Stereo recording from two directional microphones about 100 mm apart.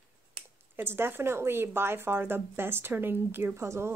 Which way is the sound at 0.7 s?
25° right (ahead or behind).